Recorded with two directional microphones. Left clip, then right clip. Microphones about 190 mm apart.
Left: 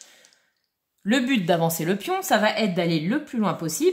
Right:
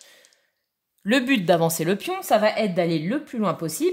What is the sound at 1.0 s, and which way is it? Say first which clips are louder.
A woman's voice: right 2 dB; 40° right (ahead or behind).